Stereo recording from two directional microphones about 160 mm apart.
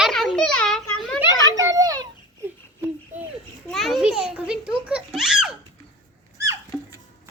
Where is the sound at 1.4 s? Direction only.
20° right (ahead or behind).